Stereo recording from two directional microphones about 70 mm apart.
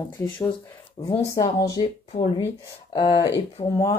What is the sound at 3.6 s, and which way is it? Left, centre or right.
Speech, left.